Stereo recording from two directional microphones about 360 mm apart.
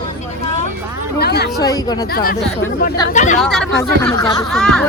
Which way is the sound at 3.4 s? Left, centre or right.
Centre.